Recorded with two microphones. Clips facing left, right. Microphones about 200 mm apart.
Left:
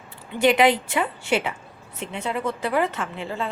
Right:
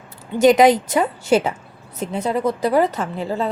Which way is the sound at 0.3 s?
40° right (ahead or behind).